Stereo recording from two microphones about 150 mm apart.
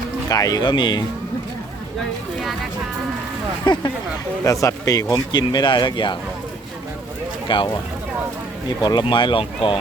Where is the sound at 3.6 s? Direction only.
30° left (ahead or behind).